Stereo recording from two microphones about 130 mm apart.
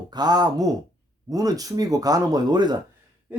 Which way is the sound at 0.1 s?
30° right (ahead or behind).